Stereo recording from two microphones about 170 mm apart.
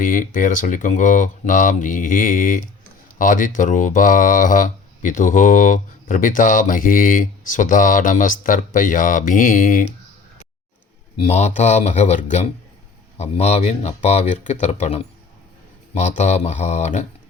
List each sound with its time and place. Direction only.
0.0 s speech: 50° left (ahead or behind)
11.2 s speech: 40° left (ahead or behind)